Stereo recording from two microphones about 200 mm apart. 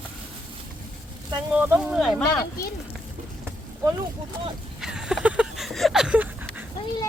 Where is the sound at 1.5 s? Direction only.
5° right (ahead or behind).